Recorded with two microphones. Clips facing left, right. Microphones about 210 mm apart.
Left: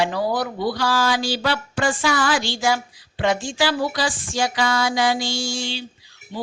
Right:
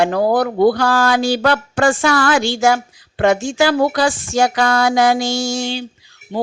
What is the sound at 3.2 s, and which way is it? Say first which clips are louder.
Speech: right 7 dB; 50° right (ahead or behind).